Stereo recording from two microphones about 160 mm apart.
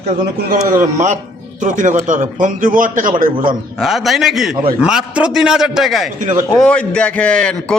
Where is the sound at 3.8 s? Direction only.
Centre (ahead or behind).